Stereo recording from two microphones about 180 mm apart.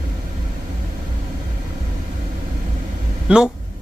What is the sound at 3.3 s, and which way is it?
Speech, 5° right (ahead or behind).